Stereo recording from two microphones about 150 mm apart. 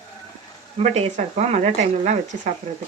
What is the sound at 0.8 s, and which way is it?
Speech, 50° right (ahead or behind).